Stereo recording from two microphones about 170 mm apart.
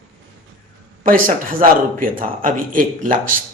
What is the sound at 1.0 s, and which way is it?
Speech, 55° right (ahead or behind).